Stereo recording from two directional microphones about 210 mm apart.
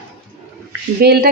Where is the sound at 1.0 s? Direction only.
50° right (ahead or behind).